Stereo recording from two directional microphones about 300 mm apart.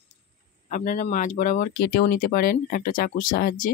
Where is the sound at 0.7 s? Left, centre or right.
Left.